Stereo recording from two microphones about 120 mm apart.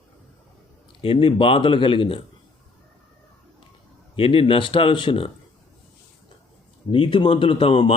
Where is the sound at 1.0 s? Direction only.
50° left (ahead or behind).